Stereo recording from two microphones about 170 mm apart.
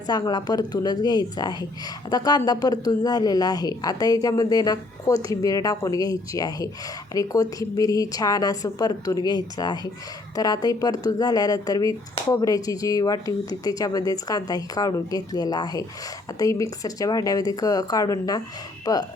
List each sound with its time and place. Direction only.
0.1 s a woman's voice: 25° left (ahead or behind)